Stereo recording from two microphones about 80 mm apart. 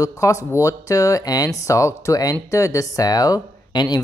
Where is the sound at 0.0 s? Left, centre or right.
Left.